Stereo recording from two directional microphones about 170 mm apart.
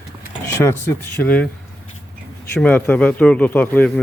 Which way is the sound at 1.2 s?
10° left (ahead or behind).